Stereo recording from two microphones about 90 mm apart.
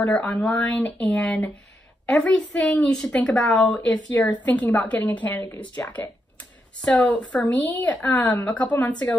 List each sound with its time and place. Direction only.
0.1 s a woman's voice: 10° left (ahead or behind)
5.8 s speech: 25° left (ahead or behind)
6.8 s a woman's voice: 10° left (ahead or behind)